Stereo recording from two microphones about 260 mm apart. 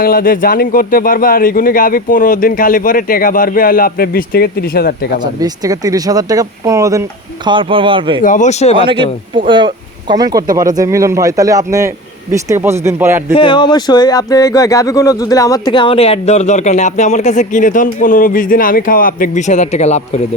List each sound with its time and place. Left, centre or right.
0.0 s speech: left
5.2 s speech: centre
8.2 s speech: left
8.9 s speech: centre
13.3 s speech: centre